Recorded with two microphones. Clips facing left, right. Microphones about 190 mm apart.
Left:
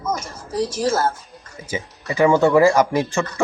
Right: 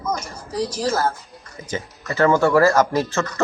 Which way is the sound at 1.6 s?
10° left (ahead or behind).